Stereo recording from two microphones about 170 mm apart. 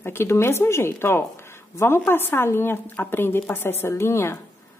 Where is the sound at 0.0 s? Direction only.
15° left (ahead or behind).